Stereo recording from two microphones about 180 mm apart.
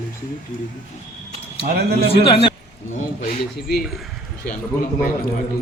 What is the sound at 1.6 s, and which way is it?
Speech, 60° right (ahead or behind).